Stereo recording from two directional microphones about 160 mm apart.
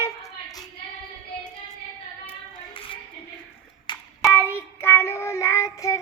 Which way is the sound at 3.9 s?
30° left (ahead or behind).